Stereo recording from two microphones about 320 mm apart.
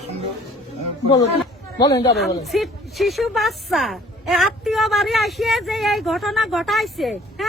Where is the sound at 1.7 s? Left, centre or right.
Centre.